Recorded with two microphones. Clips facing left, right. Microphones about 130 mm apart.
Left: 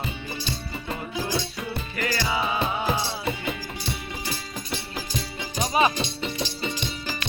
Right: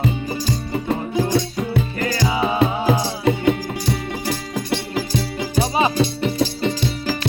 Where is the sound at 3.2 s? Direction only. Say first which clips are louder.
Right 11 dB; 75° right (ahead or behind).